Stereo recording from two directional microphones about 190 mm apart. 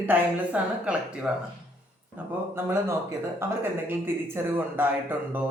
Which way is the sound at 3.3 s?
10° right (ahead or behind).